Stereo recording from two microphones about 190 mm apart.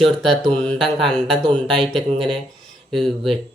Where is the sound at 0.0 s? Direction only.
Centre (ahead or behind).